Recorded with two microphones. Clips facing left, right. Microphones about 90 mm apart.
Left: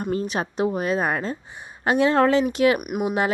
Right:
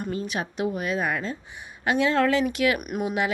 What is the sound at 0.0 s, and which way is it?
A woman's voice, 40° left (ahead or behind).